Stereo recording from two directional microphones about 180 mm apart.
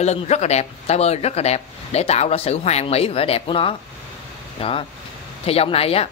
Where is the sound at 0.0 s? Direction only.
35° left (ahead or behind).